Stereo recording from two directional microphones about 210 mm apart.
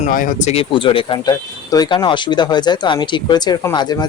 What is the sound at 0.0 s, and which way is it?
Speech, 40° left (ahead or behind).